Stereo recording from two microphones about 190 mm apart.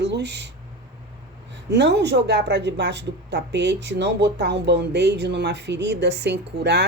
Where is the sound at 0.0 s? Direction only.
65° right (ahead or behind).